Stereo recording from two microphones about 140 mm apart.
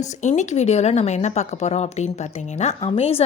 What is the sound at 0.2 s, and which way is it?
A woman's voice, 60° left (ahead or behind).